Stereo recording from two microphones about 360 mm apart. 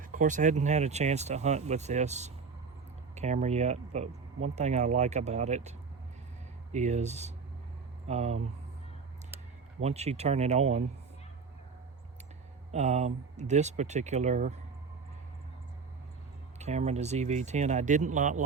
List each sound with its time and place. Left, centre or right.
0.0 s speech: right
6.7 s speech: centre
9.8 s speech: centre
12.7 s speech: centre
16.6 s speech: centre